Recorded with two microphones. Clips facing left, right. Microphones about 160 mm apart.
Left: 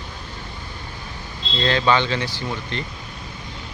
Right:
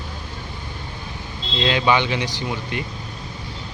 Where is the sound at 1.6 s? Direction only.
15° right (ahead or behind).